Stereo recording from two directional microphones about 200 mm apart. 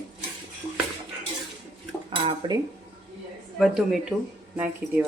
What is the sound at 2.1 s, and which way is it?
Dishes, 25° right (ahead or behind).